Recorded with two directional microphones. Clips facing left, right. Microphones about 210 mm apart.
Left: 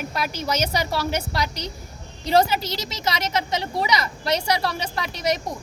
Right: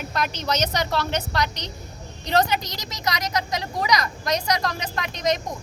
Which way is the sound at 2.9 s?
25° left (ahead or behind).